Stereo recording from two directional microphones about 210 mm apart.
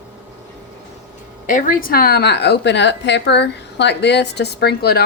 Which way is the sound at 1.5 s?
40° left (ahead or behind).